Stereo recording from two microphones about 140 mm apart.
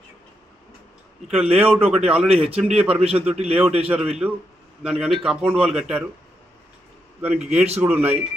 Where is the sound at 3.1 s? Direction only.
10° right (ahead or behind).